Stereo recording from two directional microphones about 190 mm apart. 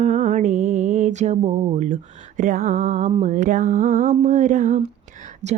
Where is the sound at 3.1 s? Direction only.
40° right (ahead or behind).